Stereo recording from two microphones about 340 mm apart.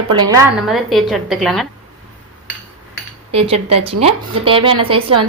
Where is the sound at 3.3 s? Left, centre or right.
Centre.